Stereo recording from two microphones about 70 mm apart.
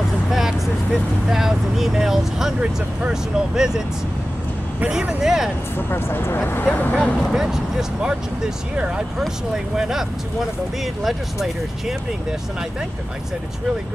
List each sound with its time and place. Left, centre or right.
0.3 s vehicle: centre
1.3 s speech: centre
5.2 s speech: centre
5.8 s speech: left
7.3 s speech: centre
11.1 s speech: centre